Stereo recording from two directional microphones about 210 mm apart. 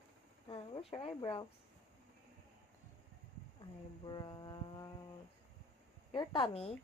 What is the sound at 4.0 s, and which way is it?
Speech, 20° left (ahead or behind).